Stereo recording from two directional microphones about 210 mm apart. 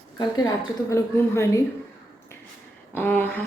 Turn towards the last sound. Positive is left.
turn(degrees=10)  # may be behind; listen again after turning